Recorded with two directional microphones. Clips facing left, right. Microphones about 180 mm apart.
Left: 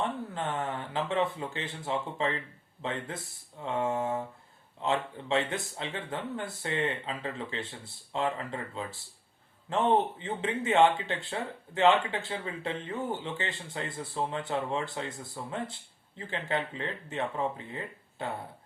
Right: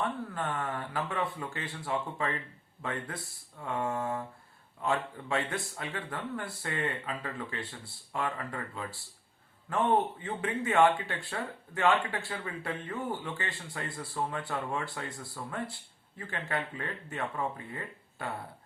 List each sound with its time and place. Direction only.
0.0 s speech: 20° left (ahead or behind)